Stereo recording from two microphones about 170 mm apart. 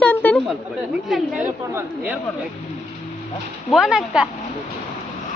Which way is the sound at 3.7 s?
5° right (ahead or behind).